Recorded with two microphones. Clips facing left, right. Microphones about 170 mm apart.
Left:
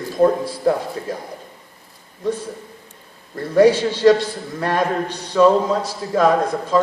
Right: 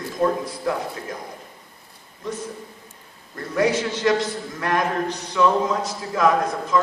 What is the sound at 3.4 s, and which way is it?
A man's voice, 35° left (ahead or behind).